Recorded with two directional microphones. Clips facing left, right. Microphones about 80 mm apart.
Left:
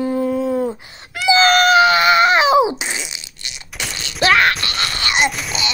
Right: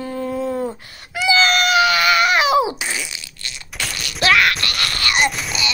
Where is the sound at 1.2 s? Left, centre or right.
Left.